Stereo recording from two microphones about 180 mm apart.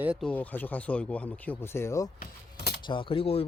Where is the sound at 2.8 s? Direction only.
30° left (ahead or behind).